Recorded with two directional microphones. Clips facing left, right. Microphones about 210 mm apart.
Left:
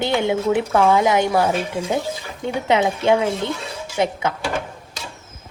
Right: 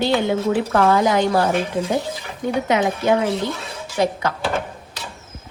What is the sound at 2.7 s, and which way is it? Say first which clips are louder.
A woman's voice: left 2 dB; 25° left (ahead or behind).